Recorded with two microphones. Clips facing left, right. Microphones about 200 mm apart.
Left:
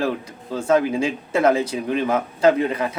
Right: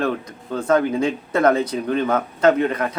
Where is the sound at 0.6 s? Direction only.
10° left (ahead or behind).